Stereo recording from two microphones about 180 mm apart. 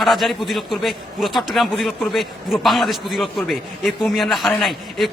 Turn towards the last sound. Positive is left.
turn(degrees=0)  # may be behind; listen again after turning